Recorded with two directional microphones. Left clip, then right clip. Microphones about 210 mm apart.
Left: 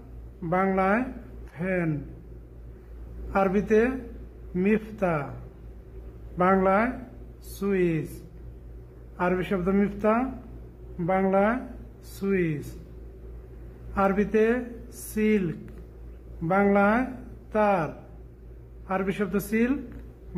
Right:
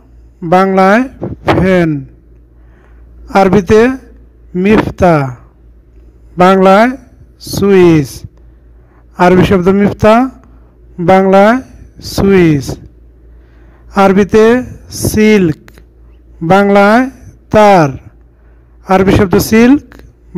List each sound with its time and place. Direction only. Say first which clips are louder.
0.4 s speech: right 17 dB; 40° right (ahead or behind)
3.3 s speech: right 16 dB; 45° right (ahead or behind)
6.3 s speech: right 16 dB; 45° right (ahead or behind)
9.1 s speech: right 19 dB; 45° right (ahead or behind)
13.9 s speech: right 16 dB; 45° right (ahead or behind)